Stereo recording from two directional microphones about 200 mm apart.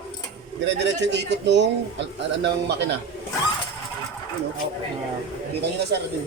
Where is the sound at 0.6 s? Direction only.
60° right (ahead or behind).